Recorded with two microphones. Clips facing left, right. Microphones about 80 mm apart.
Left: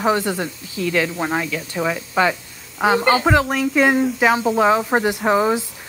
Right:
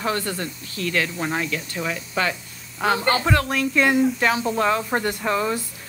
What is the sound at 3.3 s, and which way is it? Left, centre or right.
Speech, centre.